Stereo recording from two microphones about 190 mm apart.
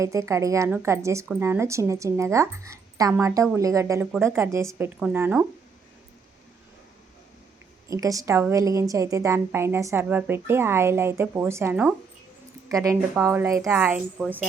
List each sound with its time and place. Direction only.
0.0 s a woman's voice: 15° right (ahead or behind)
7.9 s a woman's voice: 15° right (ahead or behind)